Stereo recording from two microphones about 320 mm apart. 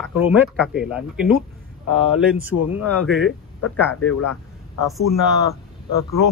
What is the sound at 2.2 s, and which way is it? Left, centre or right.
Speech, centre.